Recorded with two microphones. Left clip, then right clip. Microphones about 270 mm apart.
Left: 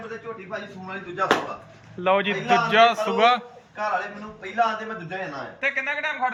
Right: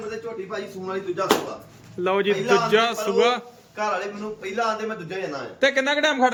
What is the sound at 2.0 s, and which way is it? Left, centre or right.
Speech, centre.